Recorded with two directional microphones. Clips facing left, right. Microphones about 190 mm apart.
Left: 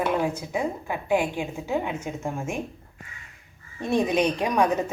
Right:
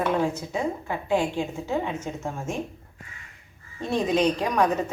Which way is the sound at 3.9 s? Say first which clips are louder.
Even; 15° left (ahead or behind).